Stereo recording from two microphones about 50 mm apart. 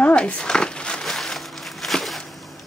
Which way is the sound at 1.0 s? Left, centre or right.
Centre.